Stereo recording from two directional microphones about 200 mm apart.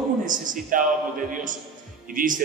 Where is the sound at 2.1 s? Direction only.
40° right (ahead or behind).